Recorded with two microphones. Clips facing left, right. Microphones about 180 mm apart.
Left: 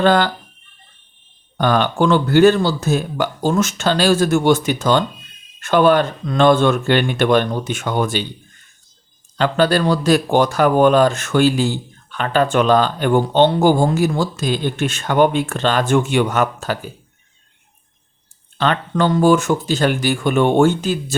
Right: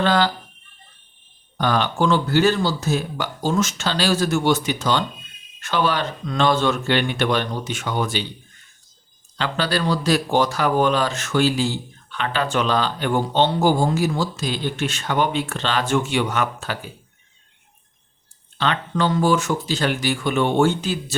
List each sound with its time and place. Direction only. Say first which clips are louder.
0.0 s speech: left 4 dB; 55° left (ahead or behind)
1.5 s speech: left 4 dB; 55° left (ahead or behind)
9.4 s speech: left 7 dB; 50° left (ahead or behind)
18.5 s speech: left 4 dB; 45° left (ahead or behind)